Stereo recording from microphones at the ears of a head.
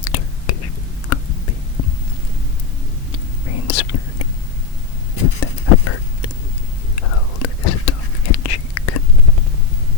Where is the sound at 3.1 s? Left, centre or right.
Left.